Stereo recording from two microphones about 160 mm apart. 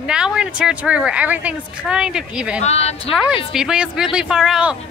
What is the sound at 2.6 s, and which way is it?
Speech, 40° left (ahead or behind).